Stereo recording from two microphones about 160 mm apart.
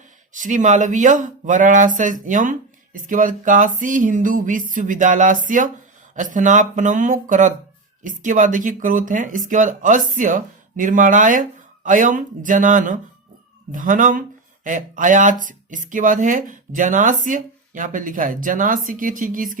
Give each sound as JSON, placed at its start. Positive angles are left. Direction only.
{"t": 0.3, "sound": "speech", "side_deg": -50}